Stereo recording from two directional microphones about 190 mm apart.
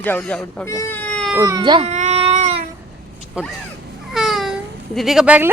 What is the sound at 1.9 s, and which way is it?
Cat, 35° right (ahead or behind).